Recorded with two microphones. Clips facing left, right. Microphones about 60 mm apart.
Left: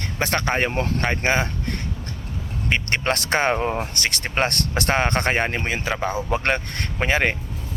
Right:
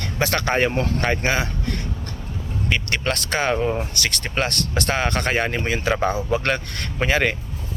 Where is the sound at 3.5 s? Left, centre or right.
Left.